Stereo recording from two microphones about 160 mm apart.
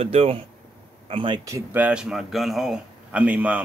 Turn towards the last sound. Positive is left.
turn(degrees=-10)  # may be behind; listen again after turning